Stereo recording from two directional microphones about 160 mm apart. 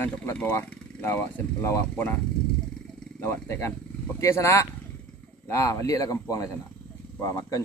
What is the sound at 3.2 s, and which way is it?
Speech, 15° left (ahead or behind).